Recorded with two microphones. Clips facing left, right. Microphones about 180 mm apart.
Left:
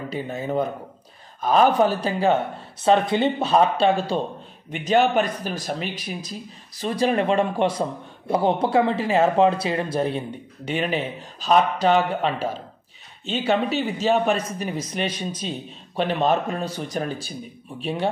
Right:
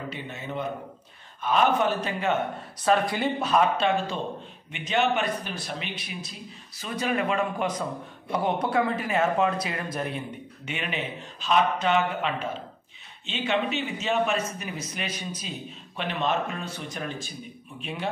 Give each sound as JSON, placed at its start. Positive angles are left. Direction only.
{"t": 0.1, "sound": "speech", "side_deg": 40}